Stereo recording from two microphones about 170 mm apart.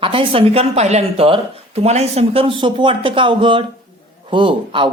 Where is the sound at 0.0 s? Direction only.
30° right (ahead or behind).